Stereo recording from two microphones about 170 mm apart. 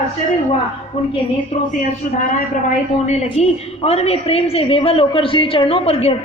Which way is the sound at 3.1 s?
40° left (ahead or behind).